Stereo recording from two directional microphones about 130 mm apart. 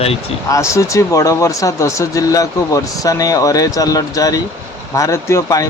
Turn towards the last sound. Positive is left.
turn(degrees=25)  # may be behind; listen again after turning